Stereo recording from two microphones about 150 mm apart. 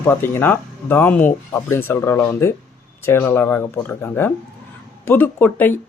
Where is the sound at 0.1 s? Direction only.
15° left (ahead or behind).